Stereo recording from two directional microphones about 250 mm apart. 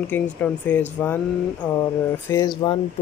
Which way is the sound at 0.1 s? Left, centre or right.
Centre.